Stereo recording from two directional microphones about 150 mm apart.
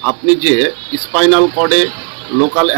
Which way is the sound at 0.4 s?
Centre (ahead or behind).